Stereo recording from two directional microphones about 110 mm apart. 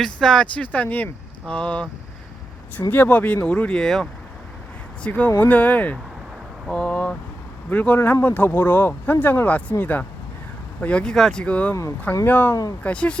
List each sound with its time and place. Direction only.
0.0 s speech: 5° left (ahead or behind)
2.9 s speech: 15° left (ahead or behind)
11.7 s speech: 30° left (ahead or behind)
12.2 s speech: 15° left (ahead or behind)